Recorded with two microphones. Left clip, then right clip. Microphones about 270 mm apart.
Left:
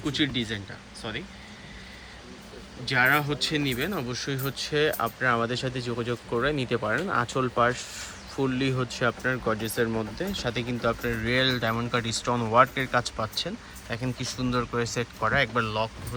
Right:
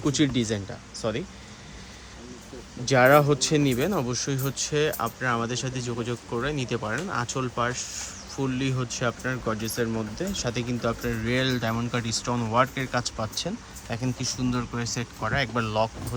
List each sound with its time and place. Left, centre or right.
0.0 s speech: right
2.8 s speech: centre